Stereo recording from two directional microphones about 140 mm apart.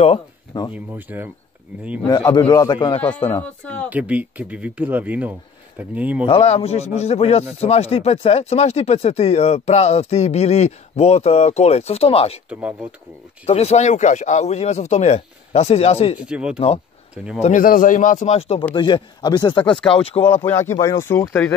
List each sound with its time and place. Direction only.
0.7 s speech: 10° right (ahead or behind)
2.0 s a man's voice: 30° left (ahead or behind)
3.0 s speech: 10° left (ahead or behind)
3.9 s speech: 10° right (ahead or behind)
6.2 s a man's voice: 45° left (ahead or behind)
12.4 s speech: 10° right (ahead or behind)
13.5 s a man's voice: 50° left (ahead or behind)
16.2 s speech: 5° right (ahead or behind)
16.5 s a man's voice: 45° left (ahead or behind)
17.1 s speech: 10° right (ahead or behind)
17.4 s speech: 65° left (ahead or behind)
18.8 s a man's voice: 35° left (ahead or behind)
20.4 s speech: 15° left (ahead or behind)